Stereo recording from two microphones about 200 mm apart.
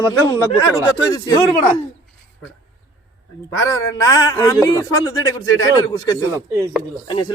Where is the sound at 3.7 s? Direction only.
15° left (ahead or behind).